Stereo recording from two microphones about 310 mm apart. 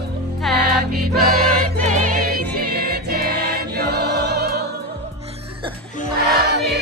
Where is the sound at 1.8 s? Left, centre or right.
Right.